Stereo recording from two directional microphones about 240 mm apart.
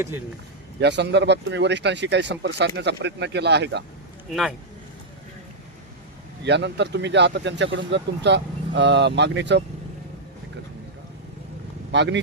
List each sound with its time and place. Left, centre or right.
0.8 s speech: right
4.3 s speech: centre
6.4 s speech: right
11.9 s speech: right